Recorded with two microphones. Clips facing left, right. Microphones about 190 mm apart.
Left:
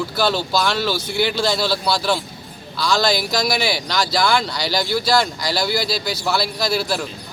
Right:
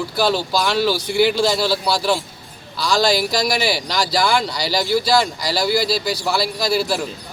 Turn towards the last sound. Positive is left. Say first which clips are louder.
# right 2 dB
turn(degrees=-10)  # may be behind; listen again after turning